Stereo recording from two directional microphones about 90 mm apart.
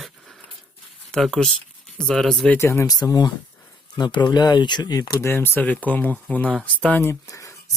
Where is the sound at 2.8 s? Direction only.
45° left (ahead or behind).